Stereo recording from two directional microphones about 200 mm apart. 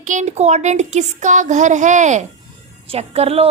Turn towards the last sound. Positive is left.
turn(degrees=-30)  # may be behind; listen again after turning